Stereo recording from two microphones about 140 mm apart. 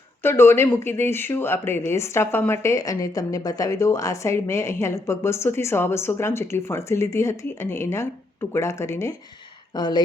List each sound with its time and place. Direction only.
0.2 s speech: 15° left (ahead or behind)
9.7 s speech: 30° left (ahead or behind)